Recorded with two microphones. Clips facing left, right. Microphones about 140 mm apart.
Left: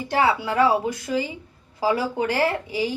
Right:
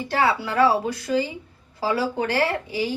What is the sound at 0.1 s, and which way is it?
Speech, 15° left (ahead or behind).